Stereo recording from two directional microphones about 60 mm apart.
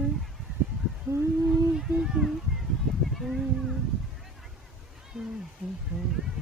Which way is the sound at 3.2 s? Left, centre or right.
Centre.